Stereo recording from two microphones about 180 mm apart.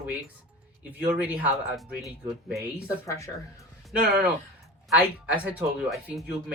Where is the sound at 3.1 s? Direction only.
15° left (ahead or behind).